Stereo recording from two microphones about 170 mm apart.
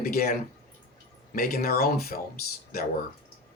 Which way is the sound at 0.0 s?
60° left (ahead or behind).